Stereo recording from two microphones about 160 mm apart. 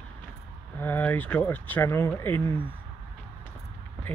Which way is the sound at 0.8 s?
10° left (ahead or behind).